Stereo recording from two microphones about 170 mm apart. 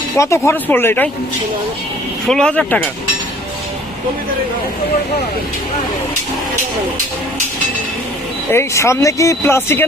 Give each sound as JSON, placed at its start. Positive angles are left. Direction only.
{"t": 0.2, "sound": "speech", "side_deg": 15}
{"t": 2.2, "sound": "speech", "side_deg": 5}
{"t": 8.5, "sound": "speech", "side_deg": 15}